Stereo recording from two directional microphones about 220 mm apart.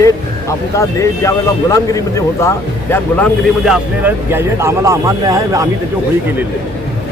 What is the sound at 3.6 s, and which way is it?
Speech, 5° right (ahead or behind).